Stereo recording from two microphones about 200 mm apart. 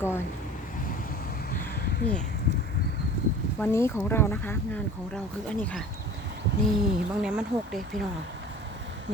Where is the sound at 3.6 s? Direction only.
10° left (ahead or behind).